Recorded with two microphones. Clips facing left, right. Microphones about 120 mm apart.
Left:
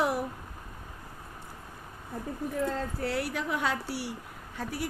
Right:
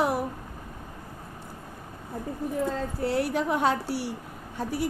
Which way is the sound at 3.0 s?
30° right (ahead or behind).